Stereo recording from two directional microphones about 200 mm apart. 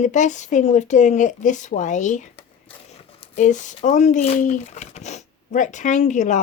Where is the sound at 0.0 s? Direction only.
35° left (ahead or behind).